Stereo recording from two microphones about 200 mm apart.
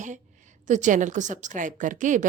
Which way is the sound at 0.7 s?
40° right (ahead or behind).